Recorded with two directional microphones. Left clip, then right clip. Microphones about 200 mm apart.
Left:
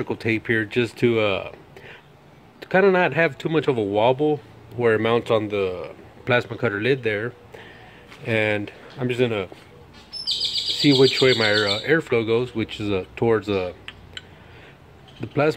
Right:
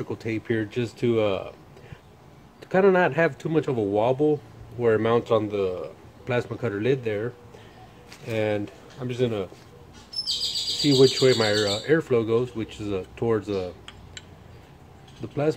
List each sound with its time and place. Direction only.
0.0 s speech: 35° left (ahead or behind)
2.6 s speech: 30° left (ahead or behind); by 9.5 s 45° left (ahead or behind)
10.8 s speech: 25° left (ahead or behind)
15.2 s speech: 35° left (ahead or behind)